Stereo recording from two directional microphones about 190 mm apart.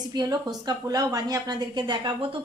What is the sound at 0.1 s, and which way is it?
A woman's voice, 20° right (ahead or behind).